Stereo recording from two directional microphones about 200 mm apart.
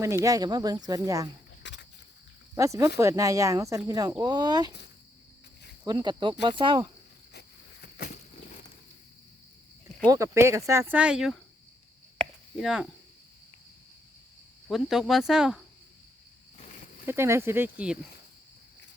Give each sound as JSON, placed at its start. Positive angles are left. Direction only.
{"t": 0.0, "sound": "speech", "side_deg": -15}
{"t": 1.6, "sound": "a sound", "side_deg": 60}
{"t": 2.6, "sound": "speech", "side_deg": -15}
{"t": 5.8, "sound": "speech", "side_deg": -20}
{"t": 7.3, "sound": "a sound", "side_deg": 50}
{"t": 10.1, "sound": "speech", "side_deg": -15}
{"t": 12.1, "sound": "chop", "side_deg": 0}
{"t": 14.7, "sound": "speech", "side_deg": 0}
{"t": 17.1, "sound": "speech", "side_deg": -15}